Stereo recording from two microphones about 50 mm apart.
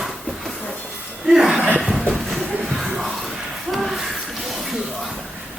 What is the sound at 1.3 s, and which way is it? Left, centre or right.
Speech, centre.